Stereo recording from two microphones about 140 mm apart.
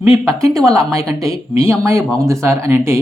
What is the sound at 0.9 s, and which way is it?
Speech, 25° right (ahead or behind).